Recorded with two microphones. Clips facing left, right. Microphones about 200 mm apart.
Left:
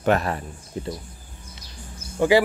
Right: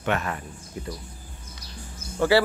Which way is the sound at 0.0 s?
35° left (ahead or behind).